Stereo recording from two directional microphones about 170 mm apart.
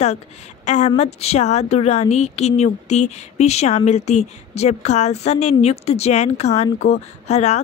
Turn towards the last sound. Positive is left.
turn(degrees=40)  # may be behind; listen again after turning